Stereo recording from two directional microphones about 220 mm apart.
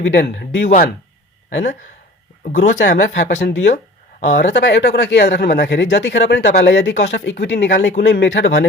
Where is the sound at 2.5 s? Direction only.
35° left (ahead or behind).